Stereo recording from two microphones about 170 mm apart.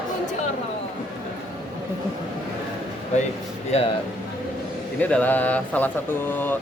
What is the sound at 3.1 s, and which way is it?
Speech, 40° left (ahead or behind).